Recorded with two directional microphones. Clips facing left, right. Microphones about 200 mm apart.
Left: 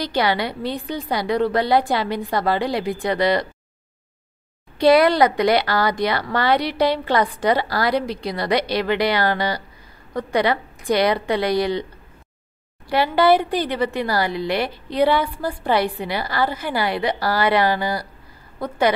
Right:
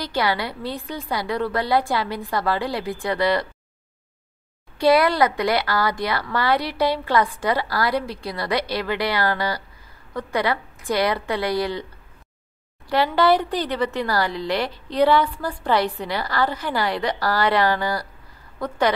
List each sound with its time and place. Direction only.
0.0 s a woman's voice: 20° left (ahead or behind)
4.7 s a woman's voice: 20° left (ahead or behind)
12.8 s a woman's voice: 10° left (ahead or behind)